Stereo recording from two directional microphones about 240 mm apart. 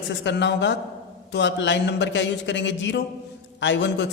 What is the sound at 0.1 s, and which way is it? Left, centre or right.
A woman's voice, left.